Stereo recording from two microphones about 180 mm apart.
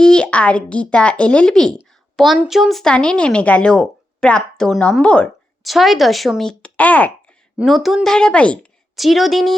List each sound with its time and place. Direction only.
0.0 s a woman's voice: 5° left (ahead or behind)